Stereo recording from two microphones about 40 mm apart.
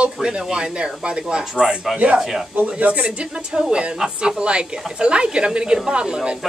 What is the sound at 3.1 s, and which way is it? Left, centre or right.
Speech, right.